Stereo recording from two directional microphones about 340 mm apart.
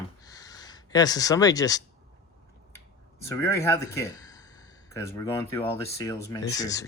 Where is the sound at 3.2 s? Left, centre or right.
Centre.